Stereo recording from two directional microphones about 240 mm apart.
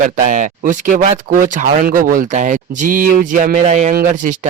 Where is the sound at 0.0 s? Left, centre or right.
Right.